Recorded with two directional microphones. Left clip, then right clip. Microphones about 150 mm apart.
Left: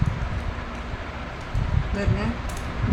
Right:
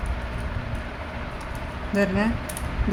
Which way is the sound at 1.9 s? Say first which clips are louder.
Right 7 dB; 90° right.